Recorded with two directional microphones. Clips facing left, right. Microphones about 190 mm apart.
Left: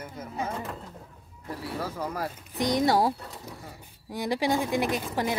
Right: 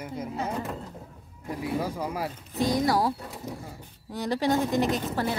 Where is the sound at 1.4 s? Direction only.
15° right (ahead or behind).